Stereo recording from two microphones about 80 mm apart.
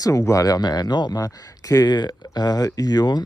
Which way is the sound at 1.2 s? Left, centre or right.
Left.